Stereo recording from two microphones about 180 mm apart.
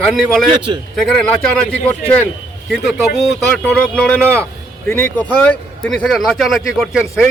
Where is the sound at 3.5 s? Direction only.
10° left (ahead or behind).